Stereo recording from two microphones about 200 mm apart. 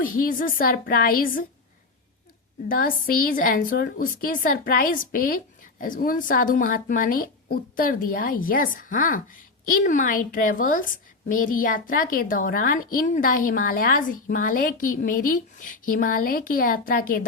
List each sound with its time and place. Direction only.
0.0 s a woman's voice: 45° left (ahead or behind)
2.6 s a woman's voice: 45° left (ahead or behind)